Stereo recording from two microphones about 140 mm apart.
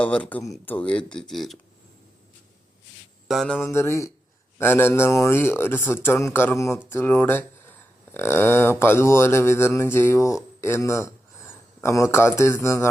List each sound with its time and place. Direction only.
0.0 s speech: 10° left (ahead or behind)
3.2 s mantra: centre (ahead or behind)
3.6 s speech: 20° left (ahead or behind)